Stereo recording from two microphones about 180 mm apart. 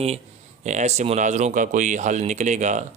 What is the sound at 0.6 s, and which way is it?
Speech, 40° right (ahead or behind).